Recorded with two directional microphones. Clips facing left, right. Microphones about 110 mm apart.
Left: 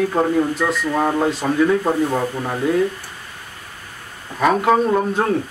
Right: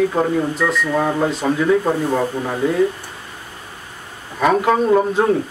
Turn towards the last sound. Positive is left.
turn(degrees=0)  # may be behind; listen again after turning